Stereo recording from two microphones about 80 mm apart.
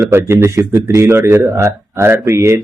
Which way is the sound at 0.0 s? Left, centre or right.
Right.